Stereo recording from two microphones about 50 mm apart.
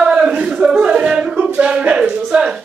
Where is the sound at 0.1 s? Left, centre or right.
Centre.